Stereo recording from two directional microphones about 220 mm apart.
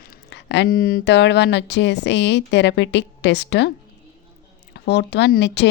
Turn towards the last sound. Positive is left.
turn(degrees=55)  # may be behind; listen again after turning